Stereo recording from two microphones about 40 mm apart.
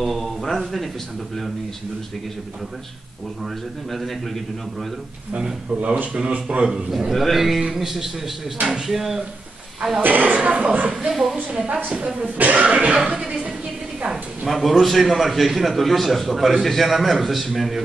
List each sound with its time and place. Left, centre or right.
0.0 s a man's voice: centre
5.4 s speech: right
7.1 s a man's voice: centre
10.0 s speech: right
10.3 s speech: right
10.9 s speech: centre
12.4 s speech: right
12.7 s speech: right
14.0 s a sound: centre
14.6 s a man's voice: centre